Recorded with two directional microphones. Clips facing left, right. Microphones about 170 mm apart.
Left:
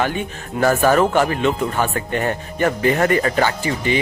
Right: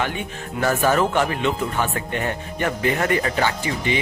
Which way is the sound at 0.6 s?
55° left (ahead or behind).